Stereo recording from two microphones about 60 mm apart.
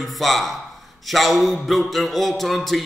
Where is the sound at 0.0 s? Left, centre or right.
Centre.